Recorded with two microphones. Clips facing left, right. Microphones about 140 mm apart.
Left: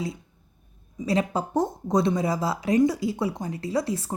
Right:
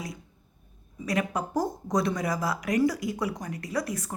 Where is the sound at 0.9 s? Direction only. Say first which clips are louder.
Left 4 dB; 25° left (ahead or behind).